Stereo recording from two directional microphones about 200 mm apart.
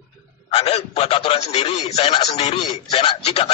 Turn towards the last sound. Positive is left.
turn(degrees=30)  # may be behind; listen again after turning